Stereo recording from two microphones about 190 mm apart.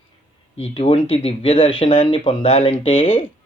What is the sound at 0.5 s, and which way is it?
Speech, 30° left (ahead or behind).